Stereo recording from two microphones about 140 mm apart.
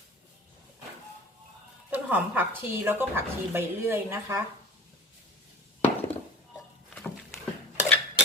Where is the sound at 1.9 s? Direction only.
10° right (ahead or behind).